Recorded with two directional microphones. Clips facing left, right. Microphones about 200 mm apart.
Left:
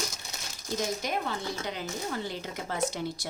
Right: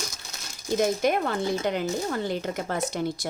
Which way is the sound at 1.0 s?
55° right (ahead or behind).